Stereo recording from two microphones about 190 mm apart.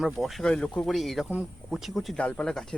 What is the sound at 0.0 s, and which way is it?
Speech, centre (ahead or behind).